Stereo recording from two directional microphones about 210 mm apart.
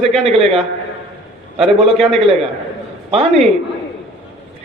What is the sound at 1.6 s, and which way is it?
A man's voice, 30° right (ahead or behind).